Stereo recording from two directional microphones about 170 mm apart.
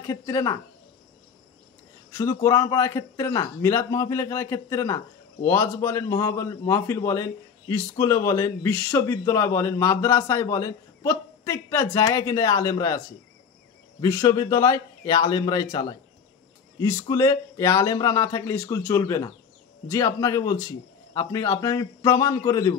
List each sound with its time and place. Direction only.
0.0 s speech: 20° left (ahead or behind)
2.1 s a man's voice: 15° left (ahead or behind)
14.0 s speech: 15° left (ahead or behind)